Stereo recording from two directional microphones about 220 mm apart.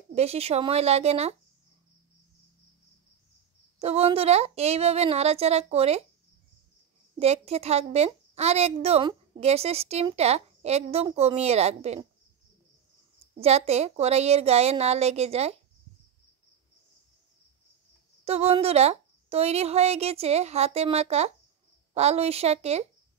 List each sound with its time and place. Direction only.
0.1 s a woman's voice: 30° right (ahead or behind)
3.8 s a woman's voice: 30° right (ahead or behind)
7.2 s a woman's voice: 30° right (ahead or behind)
13.3 s a woman's voice: 30° right (ahead or behind)
18.2 s a woman's voice: 25° right (ahead or behind)